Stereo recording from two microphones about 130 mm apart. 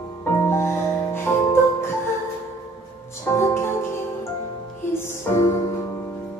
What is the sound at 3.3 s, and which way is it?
Music, 20° left (ahead or behind).